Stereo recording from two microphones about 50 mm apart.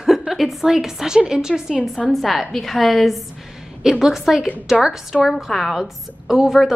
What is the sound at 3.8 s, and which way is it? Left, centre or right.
A woman's voice, centre.